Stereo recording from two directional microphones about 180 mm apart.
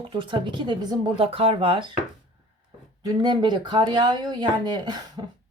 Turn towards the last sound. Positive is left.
turn(degrees=-25)  # may be behind; listen again after turning